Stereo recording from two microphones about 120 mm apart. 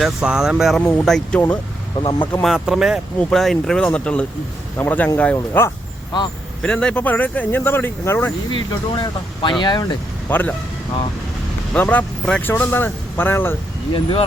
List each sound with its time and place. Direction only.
0.0 s speech: 5° right (ahead or behind)
2.0 s speech: 40° left (ahead or behind)
2.4 s speech: 5° right (ahead or behind)
3.2 s speech: 5° left (ahead or behind)
8.5 s speech: 40° left (ahead or behind)
10.2 s speech: 15° left (ahead or behind)
11.7 s speech: 15° left (ahead or behind)
13.9 s speech: 45° left (ahead or behind)